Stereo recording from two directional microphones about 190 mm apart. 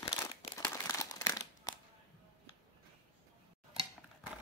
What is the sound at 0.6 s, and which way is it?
Crumpling, 15° left (ahead or behind).